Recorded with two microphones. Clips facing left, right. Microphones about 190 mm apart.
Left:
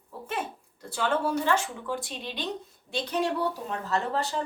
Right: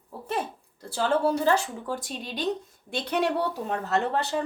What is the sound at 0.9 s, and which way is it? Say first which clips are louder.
Speech: right 3 dB; 35° right (ahead or behind).